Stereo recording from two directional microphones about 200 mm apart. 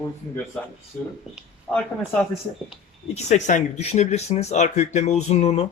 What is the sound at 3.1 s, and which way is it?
Speech, 35° left (ahead or behind).